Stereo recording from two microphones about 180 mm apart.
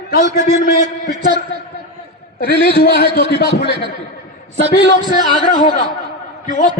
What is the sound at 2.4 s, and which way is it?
A man's voice, 60° left (ahead or behind).